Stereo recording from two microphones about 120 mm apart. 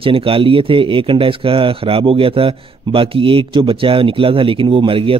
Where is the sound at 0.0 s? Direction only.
50° right (ahead or behind).